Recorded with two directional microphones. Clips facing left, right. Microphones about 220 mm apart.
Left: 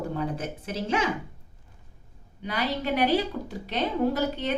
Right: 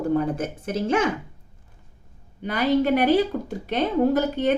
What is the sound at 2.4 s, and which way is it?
A woman's voice, 50° right (ahead or behind).